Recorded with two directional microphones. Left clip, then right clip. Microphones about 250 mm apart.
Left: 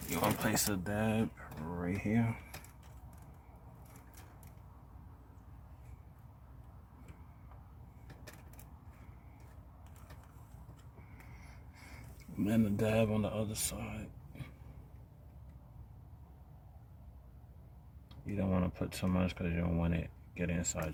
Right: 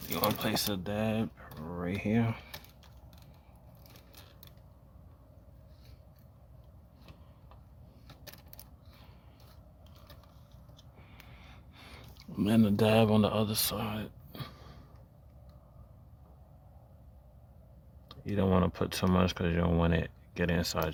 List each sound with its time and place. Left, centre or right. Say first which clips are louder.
0.1 s speech: right 2 dB; centre; by 2.4 s right
12.4 s speech: right 6 dB; right
18.1 s speech: right 8 dB; right